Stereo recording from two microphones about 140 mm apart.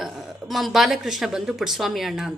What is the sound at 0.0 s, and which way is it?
A woman's voice, centre (ahead or behind).